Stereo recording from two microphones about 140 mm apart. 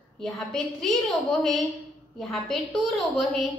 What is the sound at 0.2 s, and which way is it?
A woman's voice, 5° left (ahead or behind).